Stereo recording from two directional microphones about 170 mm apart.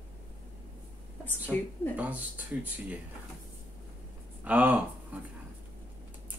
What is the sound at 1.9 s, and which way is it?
Speech, 10° right (ahead or behind).